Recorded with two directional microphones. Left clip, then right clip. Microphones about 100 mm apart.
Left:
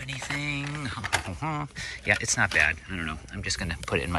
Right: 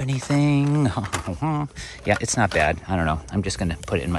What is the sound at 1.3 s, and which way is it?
Speech, 35° right (ahead or behind).